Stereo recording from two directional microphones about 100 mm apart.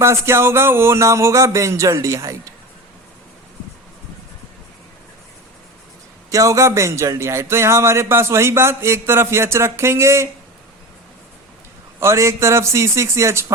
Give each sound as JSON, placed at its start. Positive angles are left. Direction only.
{"t": 0.0, "sound": "speech", "side_deg": -25}
{"t": 6.3, "sound": "speech", "side_deg": -30}
{"t": 11.9, "sound": "speech", "side_deg": -30}